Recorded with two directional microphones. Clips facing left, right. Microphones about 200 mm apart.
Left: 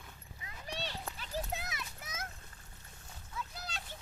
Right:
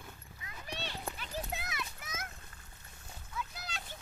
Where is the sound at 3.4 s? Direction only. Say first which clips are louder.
Right 1 dB; 30° left (ahead or behind).